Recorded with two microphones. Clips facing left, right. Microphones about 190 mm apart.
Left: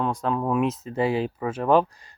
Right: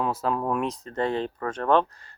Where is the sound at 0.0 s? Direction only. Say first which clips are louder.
Left 1 dB; 5° right (ahead or behind).